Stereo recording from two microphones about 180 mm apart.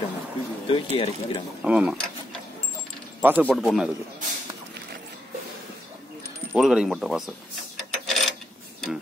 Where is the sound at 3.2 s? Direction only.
10° right (ahead or behind).